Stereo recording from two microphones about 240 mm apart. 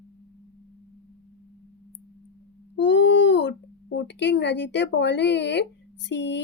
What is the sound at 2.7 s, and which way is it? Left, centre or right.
A woman's voice, left.